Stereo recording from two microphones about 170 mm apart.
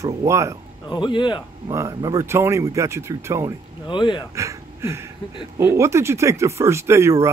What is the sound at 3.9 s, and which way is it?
Speech, 25° left (ahead or behind).